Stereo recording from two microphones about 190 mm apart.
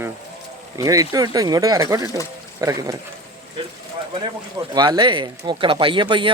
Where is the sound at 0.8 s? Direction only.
20° right (ahead or behind).